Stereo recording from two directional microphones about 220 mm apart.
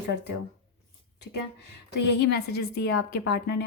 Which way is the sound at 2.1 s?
50° left (ahead or behind).